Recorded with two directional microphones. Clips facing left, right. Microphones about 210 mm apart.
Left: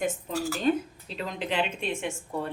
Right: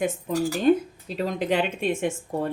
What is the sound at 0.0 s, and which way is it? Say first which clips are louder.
Speech: right 5 dB; 55° right (ahead or behind).